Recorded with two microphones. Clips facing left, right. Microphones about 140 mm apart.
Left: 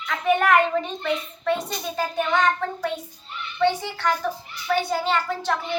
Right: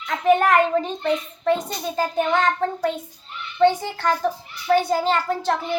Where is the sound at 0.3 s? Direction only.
35° right (ahead or behind).